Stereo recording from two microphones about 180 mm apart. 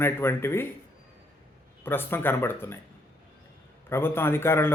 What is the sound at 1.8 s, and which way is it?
Speech, 10° left (ahead or behind).